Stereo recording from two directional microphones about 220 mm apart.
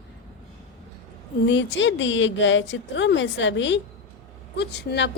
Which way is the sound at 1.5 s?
55° left (ahead or behind).